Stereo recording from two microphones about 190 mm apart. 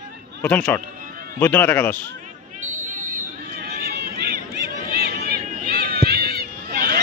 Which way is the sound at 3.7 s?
55° right (ahead or behind).